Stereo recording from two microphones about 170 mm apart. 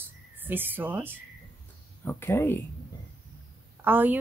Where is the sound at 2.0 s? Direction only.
15° left (ahead or behind).